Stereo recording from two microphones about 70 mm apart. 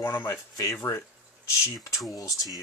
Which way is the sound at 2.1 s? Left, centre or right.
Left.